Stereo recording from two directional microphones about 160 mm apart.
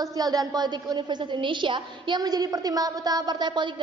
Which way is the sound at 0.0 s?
25° right (ahead or behind).